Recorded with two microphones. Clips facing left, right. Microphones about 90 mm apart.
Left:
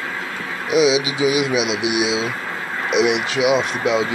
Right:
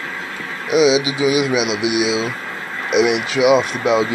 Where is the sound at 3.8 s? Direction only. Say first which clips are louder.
Right 3 dB; 35° right (ahead or behind).